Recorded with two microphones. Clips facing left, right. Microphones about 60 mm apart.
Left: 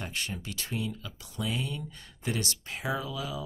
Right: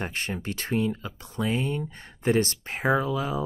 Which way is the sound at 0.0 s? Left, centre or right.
Right.